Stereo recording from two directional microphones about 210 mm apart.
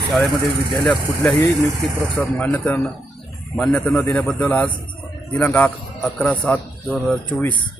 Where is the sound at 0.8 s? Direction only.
5° left (ahead or behind).